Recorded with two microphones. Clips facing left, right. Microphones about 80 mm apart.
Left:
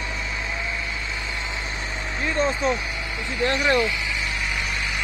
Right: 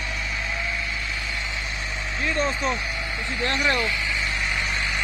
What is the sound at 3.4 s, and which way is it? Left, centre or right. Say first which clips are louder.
Speech: left 4 dB; centre.